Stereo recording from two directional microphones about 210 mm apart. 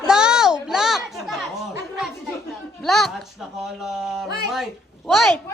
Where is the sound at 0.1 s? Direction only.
5° right (ahead or behind).